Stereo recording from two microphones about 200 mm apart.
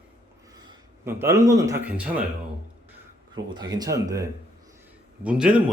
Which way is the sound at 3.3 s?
20° right (ahead or behind).